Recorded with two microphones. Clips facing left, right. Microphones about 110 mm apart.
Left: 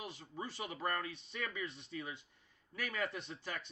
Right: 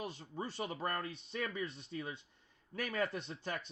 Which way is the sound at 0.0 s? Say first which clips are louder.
Right 3 dB; 35° right (ahead or behind).